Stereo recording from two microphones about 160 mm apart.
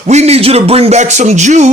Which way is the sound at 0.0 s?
45° right (ahead or behind).